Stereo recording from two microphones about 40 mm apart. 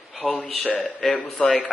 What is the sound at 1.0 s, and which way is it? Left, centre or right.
Speech, centre.